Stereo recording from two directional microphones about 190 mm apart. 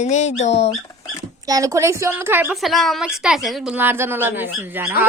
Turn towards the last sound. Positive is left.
turn(degrees=-10)  # may be behind; listen again after turning